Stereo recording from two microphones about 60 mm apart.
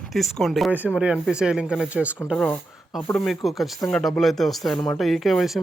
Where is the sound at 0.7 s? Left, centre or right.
Right.